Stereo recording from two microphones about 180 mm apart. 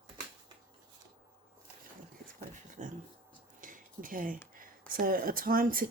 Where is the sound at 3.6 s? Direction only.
50° right (ahead or behind).